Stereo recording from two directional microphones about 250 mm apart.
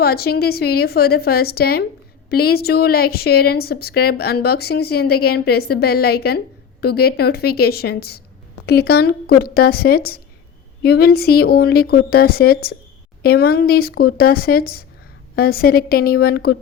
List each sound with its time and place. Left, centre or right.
0.0 s a woman's voice: left